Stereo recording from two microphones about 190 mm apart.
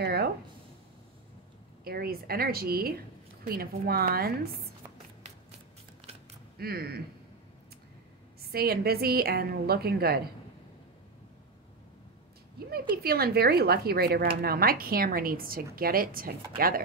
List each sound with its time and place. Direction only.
0.0 s speech: 55° right (ahead or behind)
1.9 s speech: 55° right (ahead or behind)
6.6 s speech: 55° right (ahead or behind)
8.4 s a woman's voice: 55° right (ahead or behind)
12.5 s speech: 55° right (ahead or behind)